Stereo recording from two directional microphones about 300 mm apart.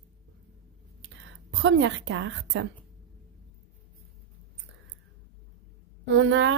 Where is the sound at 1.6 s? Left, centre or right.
Right.